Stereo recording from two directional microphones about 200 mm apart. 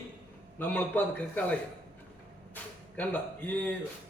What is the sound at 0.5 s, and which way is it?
Speech, 10° left (ahead or behind).